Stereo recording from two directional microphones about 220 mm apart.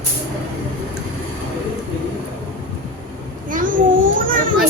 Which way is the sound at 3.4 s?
35° right (ahead or behind).